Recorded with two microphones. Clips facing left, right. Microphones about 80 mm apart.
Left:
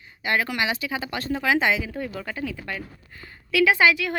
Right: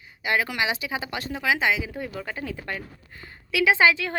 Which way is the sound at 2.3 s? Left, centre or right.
Right.